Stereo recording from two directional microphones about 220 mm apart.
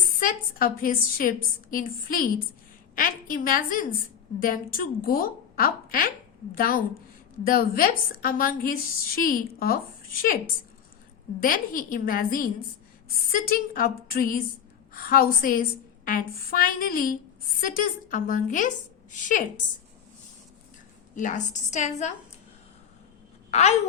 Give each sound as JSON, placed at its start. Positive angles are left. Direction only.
{"t": 0.2, "sound": "a woman's voice", "side_deg": 40}
{"t": 11.3, "sound": "a woman's voice", "side_deg": 40}
{"t": 13.5, "sound": "a woman's voice", "side_deg": 40}
{"t": 21.2, "sound": "a woman's voice", "side_deg": 35}
{"t": 23.5, "sound": "a woman's voice", "side_deg": 30}